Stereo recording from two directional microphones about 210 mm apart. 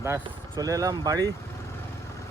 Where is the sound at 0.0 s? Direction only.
15° right (ahead or behind).